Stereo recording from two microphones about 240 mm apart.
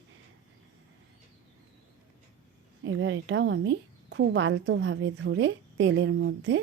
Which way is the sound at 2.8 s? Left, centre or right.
Right.